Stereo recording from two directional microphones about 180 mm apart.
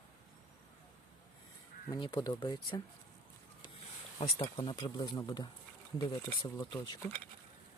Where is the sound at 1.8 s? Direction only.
25° left (ahead or behind).